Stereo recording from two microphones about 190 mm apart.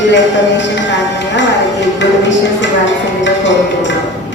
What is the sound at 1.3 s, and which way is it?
Speech, 70° left (ahead or behind).